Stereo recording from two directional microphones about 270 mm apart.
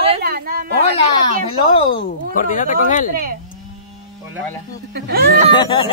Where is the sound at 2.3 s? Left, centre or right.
Left.